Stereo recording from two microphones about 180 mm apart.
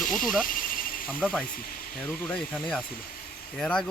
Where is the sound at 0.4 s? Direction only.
50° left (ahead or behind).